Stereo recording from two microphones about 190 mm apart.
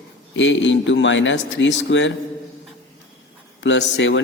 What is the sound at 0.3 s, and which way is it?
A man's voice, 75° left (ahead or behind).